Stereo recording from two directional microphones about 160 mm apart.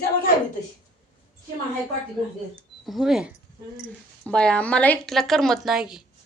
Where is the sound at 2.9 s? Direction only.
Centre (ahead or behind).